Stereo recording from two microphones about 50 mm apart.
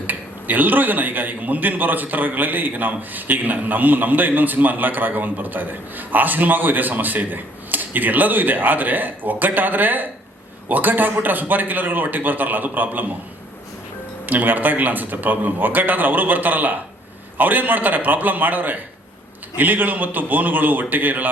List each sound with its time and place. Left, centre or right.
0.1 s speech: right
14.3 s speech: right